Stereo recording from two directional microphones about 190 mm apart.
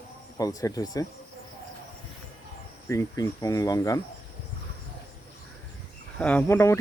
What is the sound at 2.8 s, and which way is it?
Speech, 15° left (ahead or behind).